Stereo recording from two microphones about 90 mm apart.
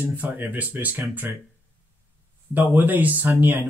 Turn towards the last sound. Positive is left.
turn(degrees=-20)  # may be behind; listen again after turning